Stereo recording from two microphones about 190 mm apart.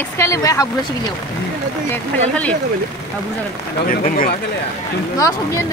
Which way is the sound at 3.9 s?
50° left (ahead or behind).